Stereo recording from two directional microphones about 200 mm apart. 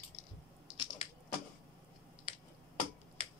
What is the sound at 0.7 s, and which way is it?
Crushing, 30° left (ahead or behind).